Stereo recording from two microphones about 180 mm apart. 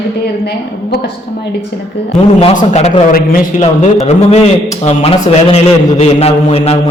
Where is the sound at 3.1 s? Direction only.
50° left (ahead or behind).